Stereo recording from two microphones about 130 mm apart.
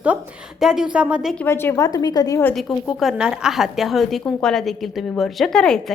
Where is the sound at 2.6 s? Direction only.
Centre (ahead or behind).